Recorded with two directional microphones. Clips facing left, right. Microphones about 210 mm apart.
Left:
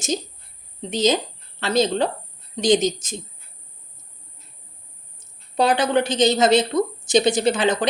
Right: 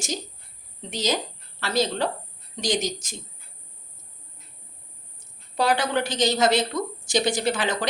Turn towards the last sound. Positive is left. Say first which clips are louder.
# left 6 dB
turn(degrees=20)  # may be behind; listen again after turning